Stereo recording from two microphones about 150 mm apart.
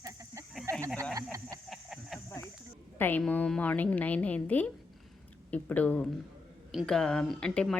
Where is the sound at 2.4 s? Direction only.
20° left (ahead or behind).